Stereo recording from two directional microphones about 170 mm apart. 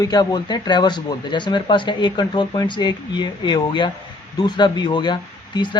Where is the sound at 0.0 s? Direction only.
25° left (ahead or behind).